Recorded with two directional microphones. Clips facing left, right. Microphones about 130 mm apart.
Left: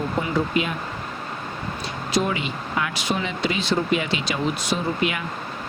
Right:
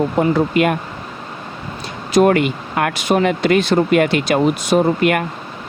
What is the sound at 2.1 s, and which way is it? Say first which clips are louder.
Speech: right 11 dB; 60° right (ahead or behind).